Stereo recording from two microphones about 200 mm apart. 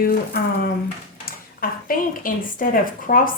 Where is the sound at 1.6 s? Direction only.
45° left (ahead or behind).